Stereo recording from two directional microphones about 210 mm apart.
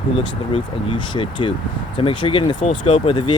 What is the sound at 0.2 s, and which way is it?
Speech, 25° left (ahead or behind).